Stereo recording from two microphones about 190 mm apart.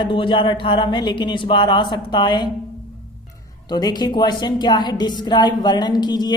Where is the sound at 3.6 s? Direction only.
20° left (ahead or behind).